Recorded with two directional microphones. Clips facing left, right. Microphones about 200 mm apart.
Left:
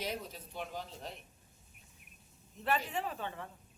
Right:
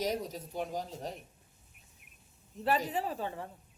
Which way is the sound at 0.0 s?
40° right (ahead or behind).